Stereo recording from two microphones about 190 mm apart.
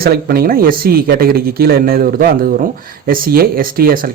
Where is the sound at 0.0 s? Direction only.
55° right (ahead or behind).